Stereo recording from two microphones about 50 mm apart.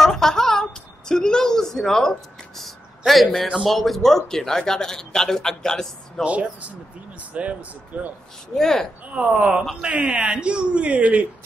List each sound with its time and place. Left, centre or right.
0.0 s a sound: centre
3.1 s a man's voice: centre
6.2 s speech: right
8.5 s a man's voice: centre
9.1 s speech: right